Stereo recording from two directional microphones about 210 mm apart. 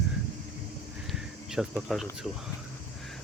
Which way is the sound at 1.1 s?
Centre (ahead or behind).